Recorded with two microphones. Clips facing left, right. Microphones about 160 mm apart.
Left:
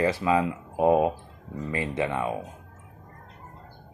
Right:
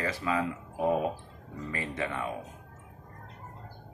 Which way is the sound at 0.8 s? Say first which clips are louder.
Left 7 dB; 90° left.